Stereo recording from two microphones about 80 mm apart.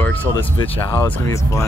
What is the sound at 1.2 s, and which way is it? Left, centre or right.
Speech, left.